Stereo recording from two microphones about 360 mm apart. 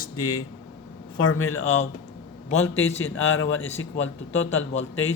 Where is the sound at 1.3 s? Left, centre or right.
Left.